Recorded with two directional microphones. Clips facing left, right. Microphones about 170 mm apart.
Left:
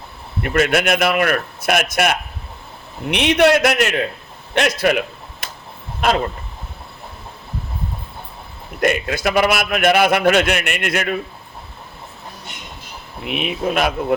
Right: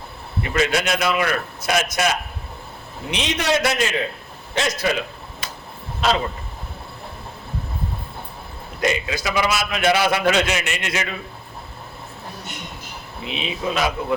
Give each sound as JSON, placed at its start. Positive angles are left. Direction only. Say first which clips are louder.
{"t": 0.4, "sound": "a man's voice", "louder": "left 4 dB", "side_deg": 55}
{"t": 4.5, "sound": "a sound", "louder": "left 5 dB", "side_deg": 65}
{"t": 6.0, "sound": "speech", "louder": "left 2 dB", "side_deg": 55}
{"t": 8.8, "sound": "a man's voice", "louder": "left 4 dB", "side_deg": 55}
{"t": 13.2, "sound": "a man's voice", "louder": "left 4 dB", "side_deg": 60}